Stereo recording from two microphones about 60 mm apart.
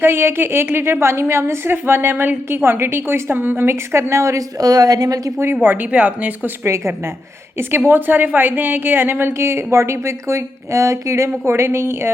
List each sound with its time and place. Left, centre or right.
0.0 s a woman's voice: right
4.6 s a woman's voice: right
5.6 s speech: right
7.9 s a woman's voice: right